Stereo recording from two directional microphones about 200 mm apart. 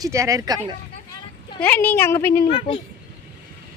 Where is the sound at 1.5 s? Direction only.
10° left (ahead or behind).